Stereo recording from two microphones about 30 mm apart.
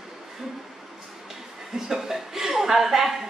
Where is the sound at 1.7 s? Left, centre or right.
Centre.